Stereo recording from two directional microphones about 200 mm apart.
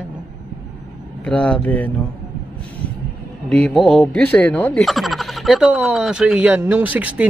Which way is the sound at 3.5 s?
Centre (ahead or behind).